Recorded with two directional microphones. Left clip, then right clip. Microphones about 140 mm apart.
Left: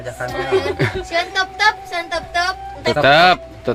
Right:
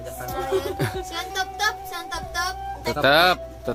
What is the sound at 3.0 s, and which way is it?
Speech, 10° right (ahead or behind).